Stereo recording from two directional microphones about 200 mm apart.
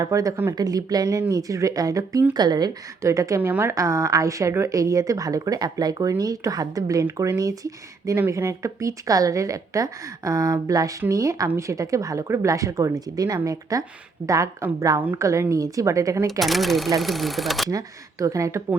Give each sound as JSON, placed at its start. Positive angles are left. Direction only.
{"t": 0.0, "sound": "speech", "side_deg": -15}
{"t": 16.4, "sound": "speech", "side_deg": 0}
{"t": 17.7, "sound": "speech", "side_deg": -15}